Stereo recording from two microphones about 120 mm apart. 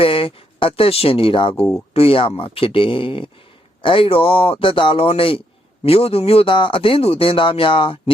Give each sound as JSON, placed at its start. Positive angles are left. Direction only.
{"t": 0.0, "sound": "speech", "side_deg": 50}